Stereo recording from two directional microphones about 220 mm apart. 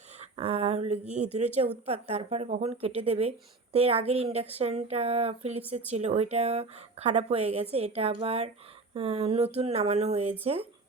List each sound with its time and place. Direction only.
0.2 s a woman's voice: 25° right (ahead or behind)